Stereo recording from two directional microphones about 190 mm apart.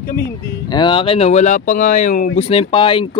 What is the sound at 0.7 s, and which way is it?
Speech, 25° left (ahead or behind).